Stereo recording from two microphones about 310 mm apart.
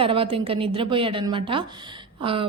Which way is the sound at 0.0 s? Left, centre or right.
Centre.